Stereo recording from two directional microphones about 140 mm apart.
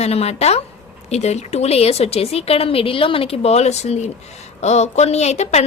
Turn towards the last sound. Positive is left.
turn(degrees=50)  # may be behind; listen again after turning